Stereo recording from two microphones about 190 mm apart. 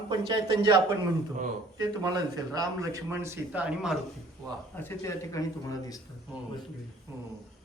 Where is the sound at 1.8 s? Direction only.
20° right (ahead or behind); by 3.9 s 5° right (ahead or behind).